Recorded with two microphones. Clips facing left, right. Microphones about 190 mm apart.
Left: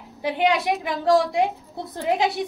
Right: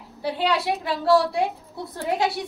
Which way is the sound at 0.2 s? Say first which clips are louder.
Left 2 dB; 15° left (ahead or behind).